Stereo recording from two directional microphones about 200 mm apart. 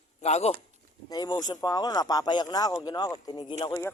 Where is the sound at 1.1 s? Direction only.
20° left (ahead or behind).